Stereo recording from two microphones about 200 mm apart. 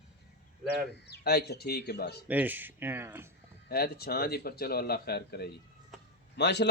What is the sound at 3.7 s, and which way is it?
A man's voice, 50° left (ahead or behind).